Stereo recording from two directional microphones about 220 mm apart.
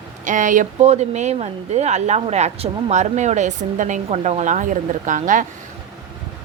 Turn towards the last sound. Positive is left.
turn(degrees=-35)  # may be behind; listen again after turning